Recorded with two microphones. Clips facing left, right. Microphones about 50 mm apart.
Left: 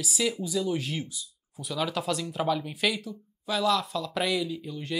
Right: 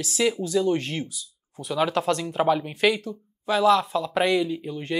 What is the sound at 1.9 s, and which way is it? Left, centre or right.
Speech, centre.